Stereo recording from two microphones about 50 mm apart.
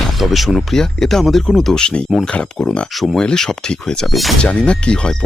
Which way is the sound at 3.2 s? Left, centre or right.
Centre.